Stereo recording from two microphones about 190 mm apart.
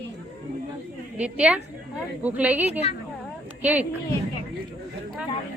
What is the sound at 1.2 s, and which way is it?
A woman's voice, 5° right (ahead or behind).